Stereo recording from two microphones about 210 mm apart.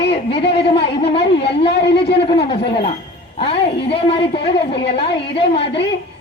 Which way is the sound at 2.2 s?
25° left (ahead or behind).